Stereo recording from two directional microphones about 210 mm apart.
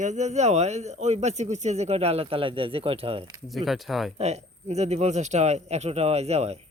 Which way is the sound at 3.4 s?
Centre (ahead or behind).